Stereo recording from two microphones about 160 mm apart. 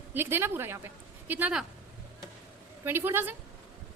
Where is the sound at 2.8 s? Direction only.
15° right (ahead or behind).